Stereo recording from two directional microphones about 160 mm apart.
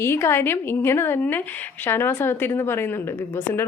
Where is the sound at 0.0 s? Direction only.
15° left (ahead or behind).